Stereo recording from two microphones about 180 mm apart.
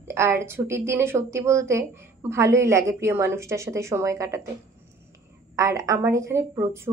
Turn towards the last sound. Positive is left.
turn(degrees=-15)  # may be behind; listen again after turning